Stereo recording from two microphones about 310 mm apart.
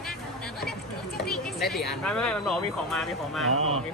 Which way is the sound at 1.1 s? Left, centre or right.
Centre.